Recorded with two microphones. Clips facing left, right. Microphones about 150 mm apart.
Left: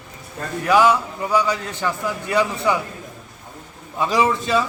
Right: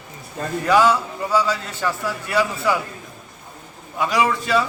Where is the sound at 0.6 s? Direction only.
15° left (ahead or behind).